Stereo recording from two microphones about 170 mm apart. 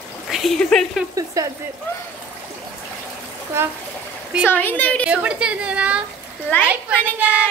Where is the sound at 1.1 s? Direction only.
20° right (ahead or behind).